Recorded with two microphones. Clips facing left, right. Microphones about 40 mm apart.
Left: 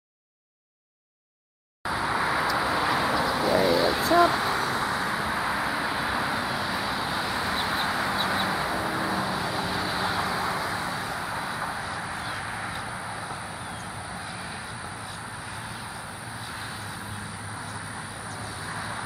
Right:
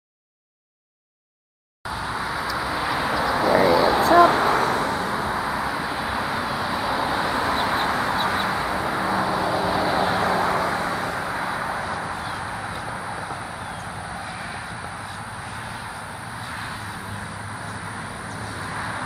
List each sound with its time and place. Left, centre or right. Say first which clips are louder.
1.9 s vehicle: left 2 dB; centre
4.1 s vehicle: right 6 dB; centre
4.7 s vehicle: right 3 dB; centre
18.8 s vehicle: right 5 dB; right